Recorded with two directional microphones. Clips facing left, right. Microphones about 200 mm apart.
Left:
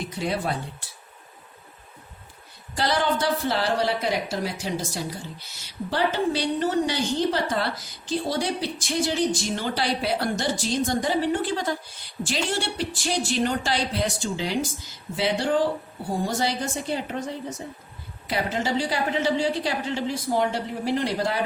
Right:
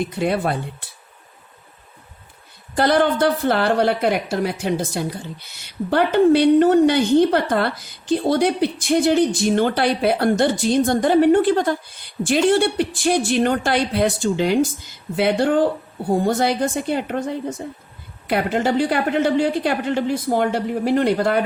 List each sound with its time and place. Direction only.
0.2 s a woman's voice: 60° right (ahead or behind)
2.7 s a woman's voice: 55° right (ahead or behind)